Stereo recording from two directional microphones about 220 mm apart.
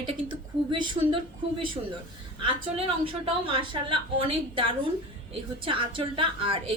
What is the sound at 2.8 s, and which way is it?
A woman's voice, 25° right (ahead or behind).